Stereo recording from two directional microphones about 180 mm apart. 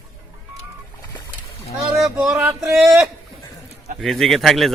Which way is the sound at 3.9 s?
Centre (ahead or behind).